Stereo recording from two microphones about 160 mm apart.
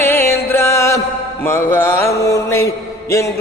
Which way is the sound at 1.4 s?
15° left (ahead or behind).